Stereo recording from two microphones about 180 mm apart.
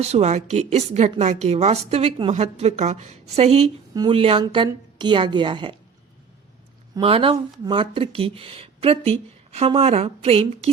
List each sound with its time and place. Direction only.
0.0 s a woman's voice: 35° right (ahead or behind)
6.9 s a woman's voice: 30° right (ahead or behind)